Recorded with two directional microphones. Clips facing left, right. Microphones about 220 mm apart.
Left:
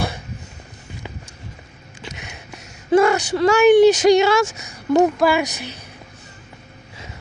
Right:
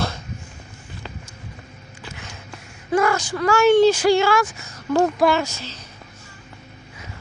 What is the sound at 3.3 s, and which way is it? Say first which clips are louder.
Speech: left 3 dB; 20° left (ahead or behind).